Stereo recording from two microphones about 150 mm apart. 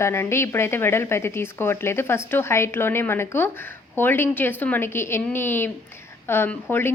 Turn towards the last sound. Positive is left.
turn(degrees=15)  # may be behind; listen again after turning